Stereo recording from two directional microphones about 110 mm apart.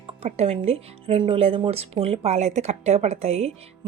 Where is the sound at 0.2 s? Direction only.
70° right (ahead or behind).